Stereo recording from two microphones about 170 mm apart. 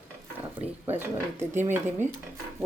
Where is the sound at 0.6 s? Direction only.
10° right (ahead or behind).